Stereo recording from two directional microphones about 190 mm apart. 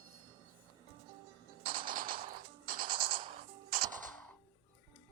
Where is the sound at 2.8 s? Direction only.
25° right (ahead or behind).